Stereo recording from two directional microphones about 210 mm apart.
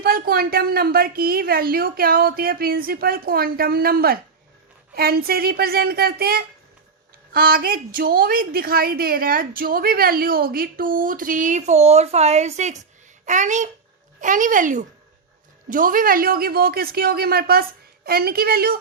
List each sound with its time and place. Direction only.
0.0 s a woman's voice: 45° right (ahead or behind)